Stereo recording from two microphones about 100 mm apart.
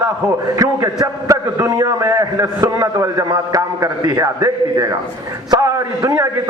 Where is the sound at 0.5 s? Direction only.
35° right (ahead or behind).